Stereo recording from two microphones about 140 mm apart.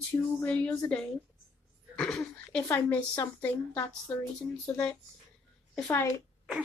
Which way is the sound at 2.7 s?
15° left (ahead or behind).